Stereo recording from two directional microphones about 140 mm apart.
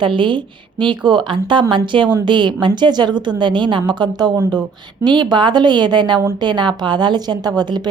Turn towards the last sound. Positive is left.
turn(degrees=-30)  # may be behind; listen again after turning